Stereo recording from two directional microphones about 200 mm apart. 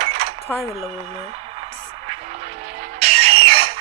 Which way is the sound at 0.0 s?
30° right (ahead or behind).